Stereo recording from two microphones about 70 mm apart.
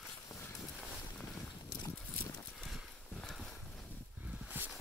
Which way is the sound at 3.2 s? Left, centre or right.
Centre.